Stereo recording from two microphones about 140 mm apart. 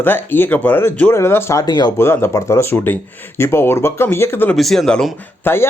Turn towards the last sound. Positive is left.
turn(degrees=15)  # may be behind; listen again after turning